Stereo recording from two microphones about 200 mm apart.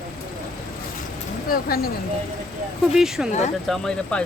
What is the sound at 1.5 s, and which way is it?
Speech, 50° left (ahead or behind).